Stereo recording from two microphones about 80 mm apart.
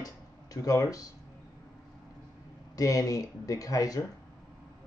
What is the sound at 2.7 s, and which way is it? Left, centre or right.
Speech, left.